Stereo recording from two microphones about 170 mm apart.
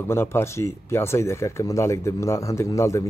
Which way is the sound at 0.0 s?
15° left (ahead or behind).